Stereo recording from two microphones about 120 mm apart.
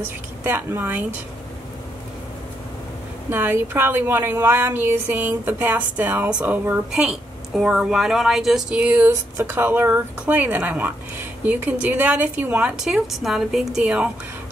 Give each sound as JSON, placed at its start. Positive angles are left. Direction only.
{"t": 0.0, "sound": "speech", "side_deg": -15}
{"t": 3.3, "sound": "speech", "side_deg": -20}